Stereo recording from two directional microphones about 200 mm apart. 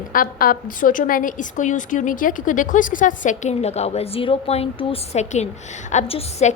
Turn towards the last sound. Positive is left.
turn(degrees=30)  # may be behind; listen again after turning